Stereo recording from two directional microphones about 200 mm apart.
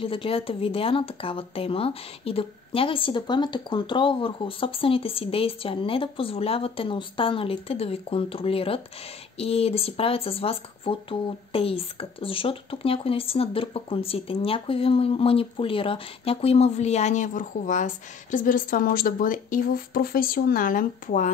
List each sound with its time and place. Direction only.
0.0 s speech: 25° left (ahead or behind)